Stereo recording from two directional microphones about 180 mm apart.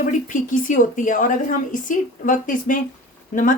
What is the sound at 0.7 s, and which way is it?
Speech, 45° left (ahead or behind).